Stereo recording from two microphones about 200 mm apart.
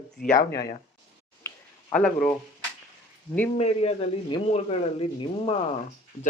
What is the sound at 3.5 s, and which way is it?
A man's voice, 30° left (ahead or behind).